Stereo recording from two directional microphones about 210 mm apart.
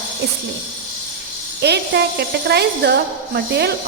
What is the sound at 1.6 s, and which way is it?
A woman's voice, 55° right (ahead or behind).